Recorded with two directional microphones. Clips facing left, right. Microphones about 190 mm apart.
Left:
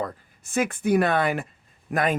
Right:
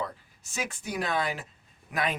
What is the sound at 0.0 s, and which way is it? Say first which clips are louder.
Speech: left 4 dB; 55° left (ahead or behind).